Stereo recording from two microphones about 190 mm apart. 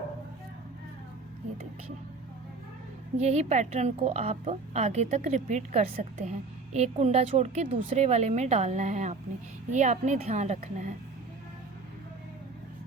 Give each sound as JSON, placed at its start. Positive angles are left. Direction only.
{"t": 3.2, "sound": "a woman's voice", "side_deg": -35}